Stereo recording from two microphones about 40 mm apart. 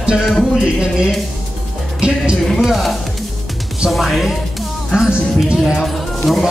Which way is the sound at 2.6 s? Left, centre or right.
Centre.